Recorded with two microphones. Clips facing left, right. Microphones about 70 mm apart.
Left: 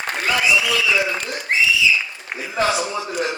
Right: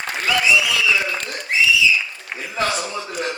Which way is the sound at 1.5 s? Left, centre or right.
Left.